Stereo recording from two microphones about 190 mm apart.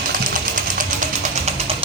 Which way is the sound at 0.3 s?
45° right (ahead or behind).